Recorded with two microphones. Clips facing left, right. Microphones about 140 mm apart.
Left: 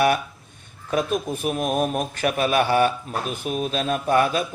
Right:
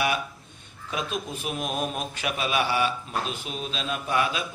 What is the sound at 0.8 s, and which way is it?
A man's voice, 50° left (ahead or behind).